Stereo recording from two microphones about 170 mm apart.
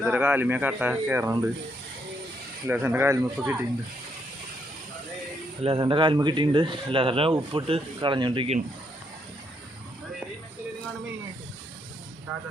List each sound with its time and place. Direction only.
0.0 s speech: 10° right (ahead or behind)
2.6 s speech: 10° right (ahead or behind)
5.6 s speech: 30° right (ahead or behind)